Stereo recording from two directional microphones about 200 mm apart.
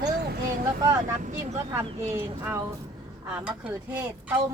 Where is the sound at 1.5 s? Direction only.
15° right (ahead or behind).